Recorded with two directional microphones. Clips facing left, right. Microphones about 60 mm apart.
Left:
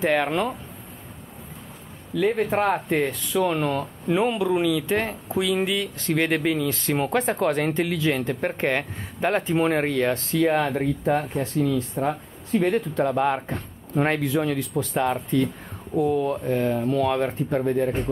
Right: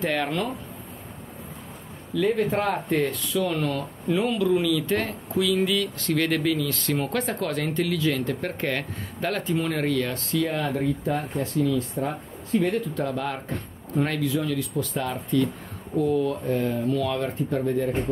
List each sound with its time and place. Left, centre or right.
0.0 s speech: left
2.1 s speech: left
3.3 s speech: left